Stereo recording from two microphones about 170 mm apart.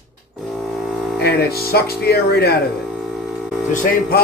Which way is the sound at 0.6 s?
Centre (ahead or behind).